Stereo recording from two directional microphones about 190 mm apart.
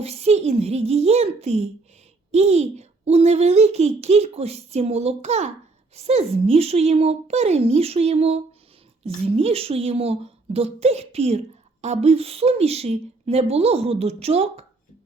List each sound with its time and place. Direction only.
0.0 s a child's voice: 35° right (ahead or behind)